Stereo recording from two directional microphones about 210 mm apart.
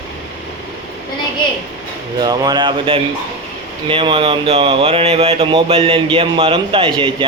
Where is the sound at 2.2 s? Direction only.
20° right (ahead or behind).